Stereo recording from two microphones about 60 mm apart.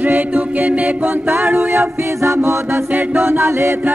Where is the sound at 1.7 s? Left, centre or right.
Right.